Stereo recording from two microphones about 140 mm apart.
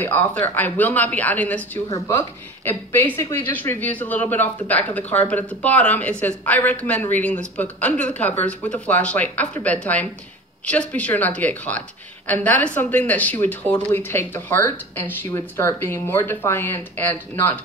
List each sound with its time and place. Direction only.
0.0 s speech: 10° left (ahead or behind)